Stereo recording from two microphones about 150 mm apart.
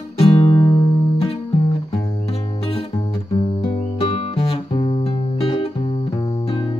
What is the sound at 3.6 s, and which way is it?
Music, 40° left (ahead or behind).